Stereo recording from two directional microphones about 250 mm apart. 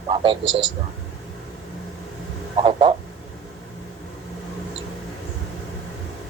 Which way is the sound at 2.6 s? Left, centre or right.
Centre.